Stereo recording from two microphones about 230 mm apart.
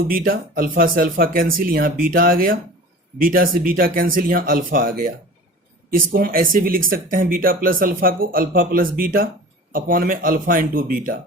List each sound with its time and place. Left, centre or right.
0.1 s speech: right